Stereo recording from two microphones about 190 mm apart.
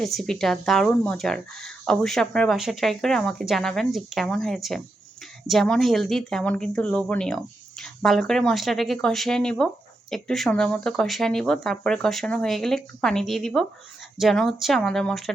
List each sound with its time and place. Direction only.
0.0 s speech: centre (ahead or behind)